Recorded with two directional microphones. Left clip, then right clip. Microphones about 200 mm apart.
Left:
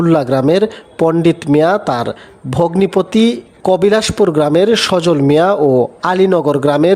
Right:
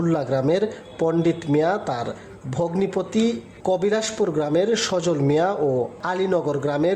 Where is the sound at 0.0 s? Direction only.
40° left (ahead or behind).